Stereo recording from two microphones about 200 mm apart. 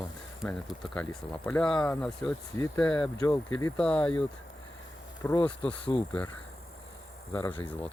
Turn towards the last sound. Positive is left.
turn(degrees=15)  # may be behind; listen again after turning